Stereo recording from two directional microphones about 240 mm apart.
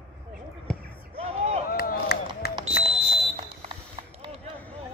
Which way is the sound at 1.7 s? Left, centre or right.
Left.